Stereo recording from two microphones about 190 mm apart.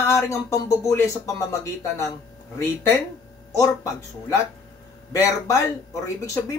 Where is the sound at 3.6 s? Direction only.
15° left (ahead or behind).